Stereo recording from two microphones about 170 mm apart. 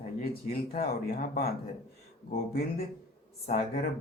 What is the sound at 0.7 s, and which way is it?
Speech, 60° left (ahead or behind).